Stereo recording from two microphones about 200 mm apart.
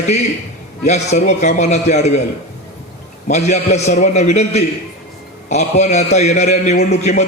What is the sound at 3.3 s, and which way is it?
A man's voice, 35° left (ahead or behind).